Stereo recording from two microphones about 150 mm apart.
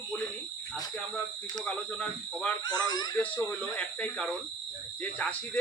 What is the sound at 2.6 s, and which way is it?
Speech, 25° left (ahead or behind).